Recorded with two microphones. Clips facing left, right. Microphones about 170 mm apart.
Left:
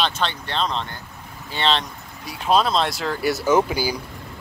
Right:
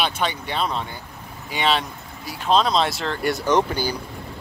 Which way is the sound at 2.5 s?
5° left (ahead or behind).